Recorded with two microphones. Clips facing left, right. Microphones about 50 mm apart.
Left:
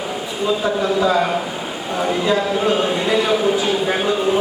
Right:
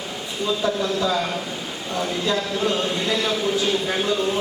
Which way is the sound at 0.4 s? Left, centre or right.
Left.